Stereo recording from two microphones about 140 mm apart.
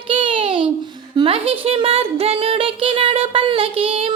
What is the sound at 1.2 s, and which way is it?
A woman's voice, 40° right (ahead or behind).